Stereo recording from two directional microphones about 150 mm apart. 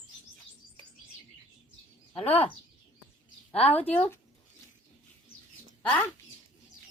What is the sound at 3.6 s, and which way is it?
Speech, 10° left (ahead or behind).